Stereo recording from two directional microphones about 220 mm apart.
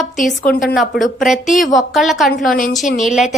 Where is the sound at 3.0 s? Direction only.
Centre (ahead or behind).